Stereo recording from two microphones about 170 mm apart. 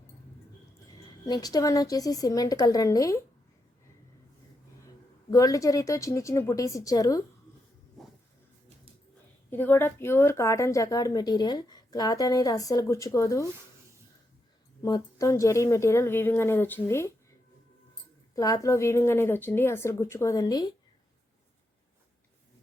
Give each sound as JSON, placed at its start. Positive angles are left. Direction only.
{"t": 1.3, "sound": "a woman's voice", "side_deg": 20}
{"t": 5.3, "sound": "a woman's voice", "side_deg": 20}
{"t": 9.5, "sound": "a woman's voice", "side_deg": 10}
{"t": 14.8, "sound": "a woman's voice", "side_deg": 20}
{"t": 18.3, "sound": "a woman's voice", "side_deg": 20}